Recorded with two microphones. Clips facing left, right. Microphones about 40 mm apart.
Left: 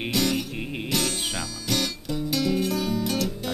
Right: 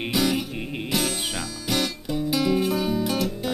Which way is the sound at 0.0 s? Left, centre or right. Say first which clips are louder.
Right 1 dB; centre.